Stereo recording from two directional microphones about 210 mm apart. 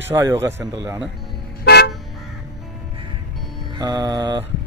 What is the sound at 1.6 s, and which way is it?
Car, 50° left (ahead or behind).